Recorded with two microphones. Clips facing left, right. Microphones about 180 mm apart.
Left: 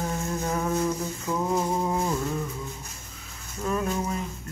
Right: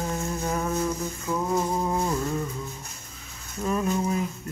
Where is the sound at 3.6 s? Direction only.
5° right (ahead or behind).